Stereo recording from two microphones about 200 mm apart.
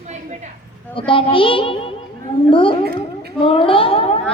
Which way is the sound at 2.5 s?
25° left (ahead or behind).